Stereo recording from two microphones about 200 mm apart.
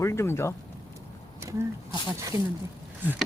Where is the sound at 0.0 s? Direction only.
15° left (ahead or behind).